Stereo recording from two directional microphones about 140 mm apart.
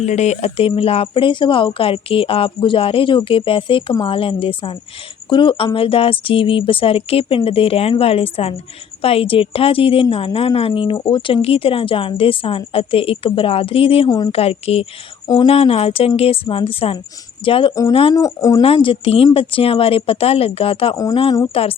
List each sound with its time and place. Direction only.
0.0 s speech: 55° left (ahead or behind); by 17.7 s 40° left (ahead or behind)
18.1 s speech: 25° left (ahead or behind)
18.6 s speech: 40° left (ahead or behind)
20.9 s speech: 25° left (ahead or behind)
21.5 s speech: 40° left (ahead or behind)